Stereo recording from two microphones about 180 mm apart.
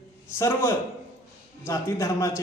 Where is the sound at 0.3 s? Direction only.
15° left (ahead or behind).